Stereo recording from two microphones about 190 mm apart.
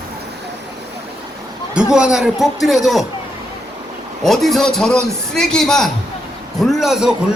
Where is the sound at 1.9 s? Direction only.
5° right (ahead or behind).